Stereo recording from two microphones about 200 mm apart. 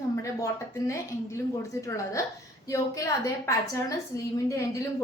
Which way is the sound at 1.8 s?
15° left (ahead or behind).